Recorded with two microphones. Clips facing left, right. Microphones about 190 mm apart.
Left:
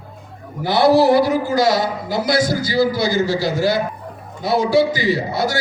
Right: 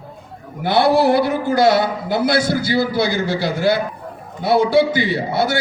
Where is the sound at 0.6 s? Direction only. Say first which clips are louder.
Left 1 dB; 60° right (ahead or behind).